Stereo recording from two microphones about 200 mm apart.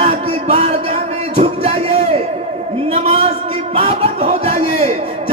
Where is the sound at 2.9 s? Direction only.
30° right (ahead or behind).